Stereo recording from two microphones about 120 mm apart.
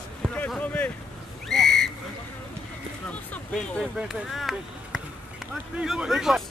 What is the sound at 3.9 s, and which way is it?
Speech, centre (ahead or behind).